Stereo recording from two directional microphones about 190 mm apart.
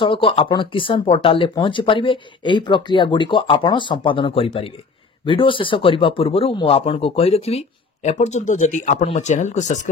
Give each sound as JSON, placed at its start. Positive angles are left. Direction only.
{"t": 0.0, "sound": "speech", "side_deg": 25}